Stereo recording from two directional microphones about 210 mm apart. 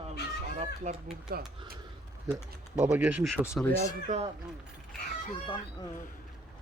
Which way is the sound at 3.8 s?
30° right (ahead or behind).